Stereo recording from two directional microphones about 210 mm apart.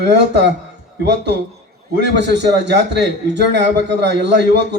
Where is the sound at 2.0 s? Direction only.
55° right (ahead or behind).